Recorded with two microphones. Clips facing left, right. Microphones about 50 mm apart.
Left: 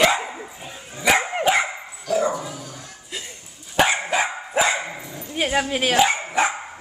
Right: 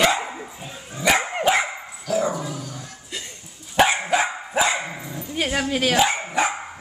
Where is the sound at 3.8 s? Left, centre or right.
Centre.